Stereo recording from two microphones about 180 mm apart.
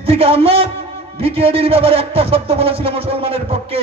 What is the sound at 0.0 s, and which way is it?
A man's voice, 35° right (ahead or behind).